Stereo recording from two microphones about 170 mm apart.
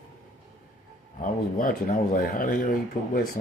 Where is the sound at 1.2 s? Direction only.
50° left (ahead or behind).